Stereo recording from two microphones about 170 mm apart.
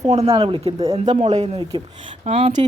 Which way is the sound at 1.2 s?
40° right (ahead or behind).